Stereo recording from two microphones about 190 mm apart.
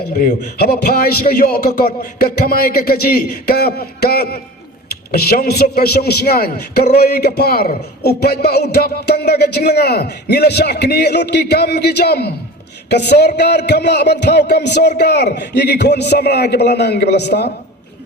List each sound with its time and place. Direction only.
0.2 s a man's voice: 50° left (ahead or behind)